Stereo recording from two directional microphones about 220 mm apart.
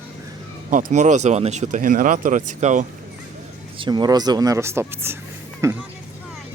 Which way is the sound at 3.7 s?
20° right (ahead or behind).